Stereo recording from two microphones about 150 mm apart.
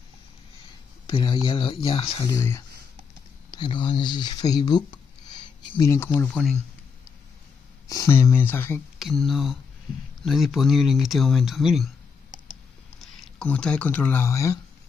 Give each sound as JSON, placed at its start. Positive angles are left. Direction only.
{"t": 1.0, "sound": "speech", "side_deg": 30}
{"t": 2.2, "sound": "speech", "side_deg": 20}
{"t": 3.5, "sound": "speech", "side_deg": 30}
{"t": 5.8, "sound": "speech", "side_deg": 20}
{"t": 7.9, "sound": "speech", "side_deg": 20}
{"t": 8.9, "sound": "speech", "side_deg": 0}
{"t": 13.0, "sound": "speech", "side_deg": 0}